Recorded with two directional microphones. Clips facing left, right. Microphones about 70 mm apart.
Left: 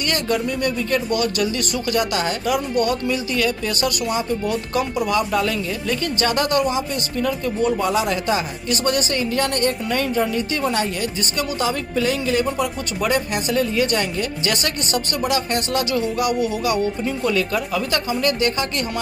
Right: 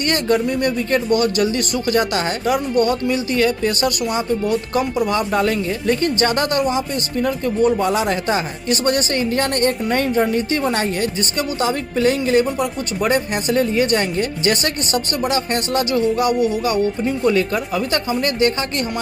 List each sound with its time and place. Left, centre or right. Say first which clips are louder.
0.0 s speech: right 4 dB; right
13.0 s speech: right 2 dB; right